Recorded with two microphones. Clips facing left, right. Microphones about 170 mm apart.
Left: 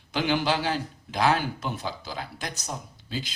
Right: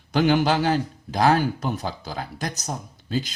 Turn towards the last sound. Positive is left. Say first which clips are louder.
# right 7 dB
turn(degrees=-45)  # may be behind; listen again after turning